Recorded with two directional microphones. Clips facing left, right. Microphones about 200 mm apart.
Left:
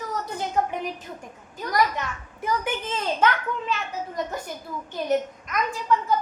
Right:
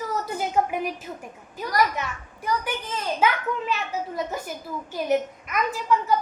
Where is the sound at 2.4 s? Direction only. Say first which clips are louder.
Left 1 dB; 20° left (ahead or behind).